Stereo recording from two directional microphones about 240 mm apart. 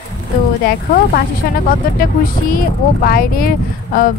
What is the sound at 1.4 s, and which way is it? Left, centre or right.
Speech, left.